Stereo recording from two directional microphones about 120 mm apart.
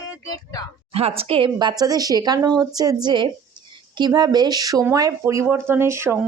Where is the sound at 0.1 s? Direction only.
30° left (ahead or behind).